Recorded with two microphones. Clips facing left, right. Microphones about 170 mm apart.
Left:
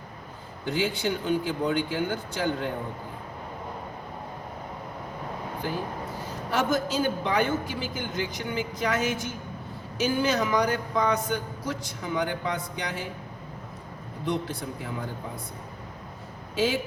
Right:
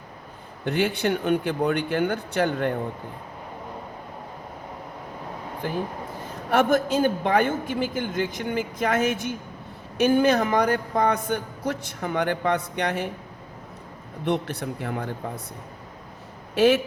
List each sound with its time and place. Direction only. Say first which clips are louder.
0.6 s speech: right 4 dB; 65° right (ahead or behind)
6.5 s speech: right 6 dB; 60° right (ahead or behind)
14.3 s speech: right 4 dB; 65° right (ahead or behind)
16.6 s speech: right 7 dB; 65° right (ahead or behind)